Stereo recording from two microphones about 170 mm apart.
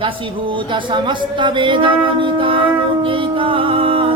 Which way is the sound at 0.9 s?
25° right (ahead or behind).